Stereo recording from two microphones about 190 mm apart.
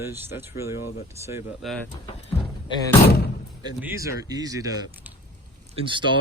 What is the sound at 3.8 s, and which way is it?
Speech, 15° right (ahead or behind).